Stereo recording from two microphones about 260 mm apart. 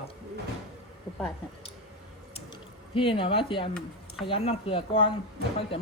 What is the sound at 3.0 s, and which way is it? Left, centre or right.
Speech, centre.